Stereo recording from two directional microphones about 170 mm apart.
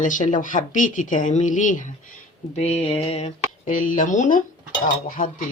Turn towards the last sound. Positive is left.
turn(degrees=55)  # may be behind; listen again after turning